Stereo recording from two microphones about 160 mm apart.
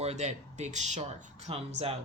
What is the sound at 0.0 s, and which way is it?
Speech, 45° right (ahead or behind).